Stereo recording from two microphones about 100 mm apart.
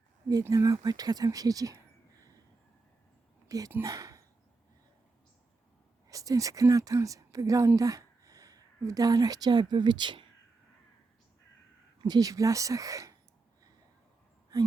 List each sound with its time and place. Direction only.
0.4 s a woman's voice: 35° right (ahead or behind)
3.5 s a woman's voice: 35° right (ahead or behind)
3.8 s a sound: 35° right (ahead or behind)
6.1 s a woman's voice: 35° right (ahead or behind); by 10.2 s 50° right (ahead or behind)
11.9 s a woman's voice: 45° right (ahead or behind)